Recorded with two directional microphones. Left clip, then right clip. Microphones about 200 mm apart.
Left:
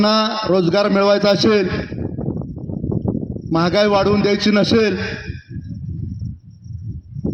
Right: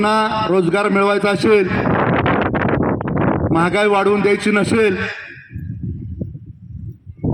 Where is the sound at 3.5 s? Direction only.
55° left (ahead or behind).